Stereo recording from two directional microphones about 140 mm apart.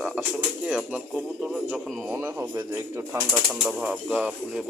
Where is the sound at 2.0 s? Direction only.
15° right (ahead or behind).